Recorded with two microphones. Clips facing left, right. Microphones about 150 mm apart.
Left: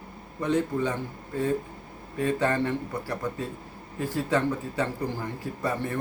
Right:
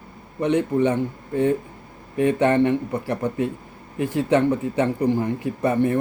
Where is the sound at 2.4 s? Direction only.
20° right (ahead or behind).